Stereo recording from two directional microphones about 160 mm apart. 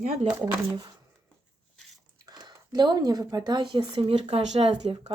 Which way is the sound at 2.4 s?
25° right (ahead or behind).